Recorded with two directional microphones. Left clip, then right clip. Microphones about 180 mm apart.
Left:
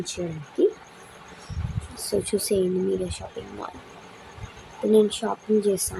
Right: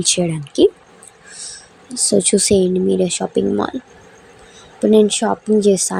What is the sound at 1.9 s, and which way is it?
Speech, 40° right (ahead or behind).